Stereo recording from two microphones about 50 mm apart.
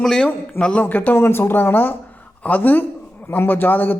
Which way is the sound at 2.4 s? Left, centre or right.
Left.